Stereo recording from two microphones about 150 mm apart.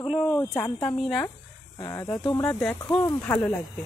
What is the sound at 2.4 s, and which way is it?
Speech, 10° left (ahead or behind).